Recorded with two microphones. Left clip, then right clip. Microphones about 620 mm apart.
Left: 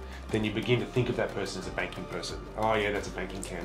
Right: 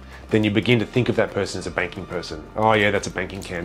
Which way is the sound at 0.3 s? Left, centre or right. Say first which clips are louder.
Right 10 dB; right.